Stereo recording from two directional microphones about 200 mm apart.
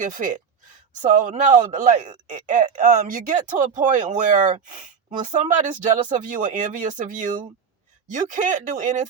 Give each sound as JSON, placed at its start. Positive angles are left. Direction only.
{"t": 0.0, "sound": "speech", "side_deg": -40}